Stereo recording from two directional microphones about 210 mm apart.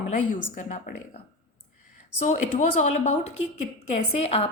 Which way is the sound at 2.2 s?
35° left (ahead or behind).